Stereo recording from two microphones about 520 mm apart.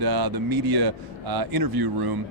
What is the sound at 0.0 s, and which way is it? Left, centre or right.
Speech, right.